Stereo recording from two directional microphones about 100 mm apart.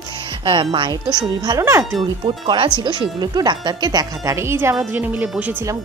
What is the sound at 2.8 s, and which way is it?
Speech, 50° right (ahead or behind).